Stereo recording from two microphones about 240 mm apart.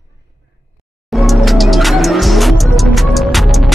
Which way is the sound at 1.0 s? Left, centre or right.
Centre.